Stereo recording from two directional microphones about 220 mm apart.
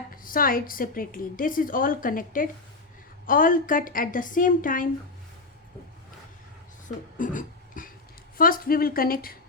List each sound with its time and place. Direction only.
0.1 s a woman's voice: 40° left (ahead or behind)
6.8 s a sound: 35° left (ahead or behind)
8.4 s a woman's voice: 40° left (ahead or behind)